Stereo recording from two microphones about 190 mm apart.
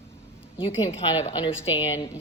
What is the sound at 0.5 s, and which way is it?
Speech, 30° left (ahead or behind).